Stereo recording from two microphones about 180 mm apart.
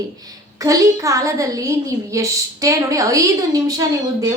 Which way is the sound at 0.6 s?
20° right (ahead or behind).